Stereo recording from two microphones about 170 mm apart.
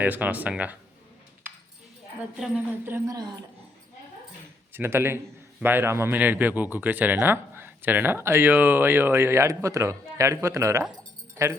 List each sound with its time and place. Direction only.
0.0 s a man's voice: 10° right (ahead or behind)
2.3 s a man's voice: 10° right (ahead or behind)
4.7 s a man's voice: 15° right (ahead or behind)
10.9 s music: 15° right (ahead or behind)